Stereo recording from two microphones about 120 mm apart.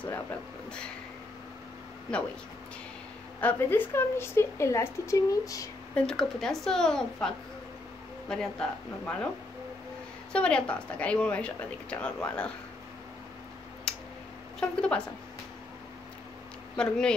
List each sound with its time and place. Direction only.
3.3 s a woman's voice: 15° left (ahead or behind); by 5.7 s 30° left (ahead or behind)
5.9 s a woman's voice: 5° left (ahead or behind)
10.3 s a woman's voice: 10° left (ahead or behind)
13.9 s a sound: 5° left (ahead or behind)
14.6 s a woman's voice: 10° left (ahead or behind)
16.7 s a woman's voice: 5° left (ahead or behind)